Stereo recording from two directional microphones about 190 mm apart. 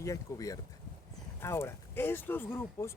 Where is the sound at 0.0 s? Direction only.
15° left (ahead or behind).